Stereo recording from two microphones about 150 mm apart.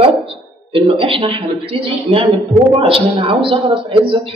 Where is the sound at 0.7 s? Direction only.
35° right (ahead or behind).